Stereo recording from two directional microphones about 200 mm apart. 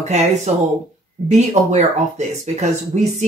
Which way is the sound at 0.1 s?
35° right (ahead or behind).